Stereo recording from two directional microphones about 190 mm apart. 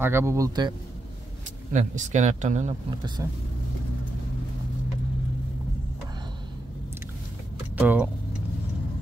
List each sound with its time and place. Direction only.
0.0 s speech: 15° right (ahead or behind)
1.7 s speech: 40° right (ahead or behind)
3.2 s speech: 15° right (ahead or behind)
7.8 s vehicle: 10° right (ahead or behind)